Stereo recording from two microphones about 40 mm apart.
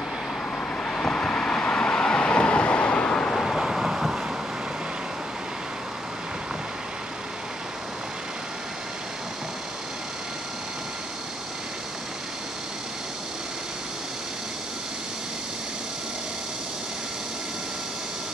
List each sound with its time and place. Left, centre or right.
0.8 s vehicle: left
3.1 s vehicle: centre
3.3 s vehicle: centre